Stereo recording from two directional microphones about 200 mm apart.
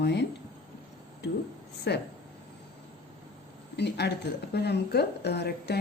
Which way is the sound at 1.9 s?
60° left (ahead or behind).